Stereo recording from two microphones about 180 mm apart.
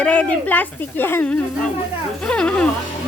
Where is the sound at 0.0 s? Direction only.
5° left (ahead or behind).